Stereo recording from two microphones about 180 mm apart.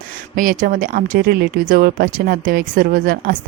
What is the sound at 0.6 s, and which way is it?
A woman's voice, 50° right (ahead or behind).